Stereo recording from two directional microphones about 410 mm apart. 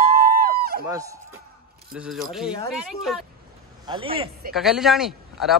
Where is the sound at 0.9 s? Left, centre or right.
Centre.